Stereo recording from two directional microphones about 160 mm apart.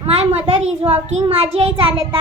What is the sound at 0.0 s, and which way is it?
A child's voice, 40° right (ahead or behind).